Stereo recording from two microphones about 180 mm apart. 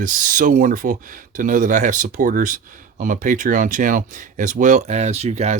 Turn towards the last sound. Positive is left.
turn(degrees=-35)  # may be behind; listen again after turning